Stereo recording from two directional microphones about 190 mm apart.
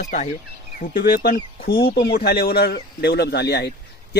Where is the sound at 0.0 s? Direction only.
40° left (ahead or behind).